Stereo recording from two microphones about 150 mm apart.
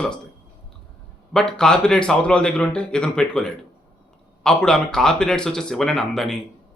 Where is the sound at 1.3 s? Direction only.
5° left (ahead or behind).